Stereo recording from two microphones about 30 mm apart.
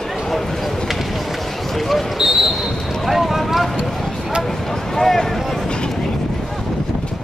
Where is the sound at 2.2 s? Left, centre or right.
Centre.